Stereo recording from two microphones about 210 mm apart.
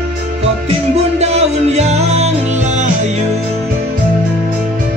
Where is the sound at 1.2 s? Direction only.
30° right (ahead or behind).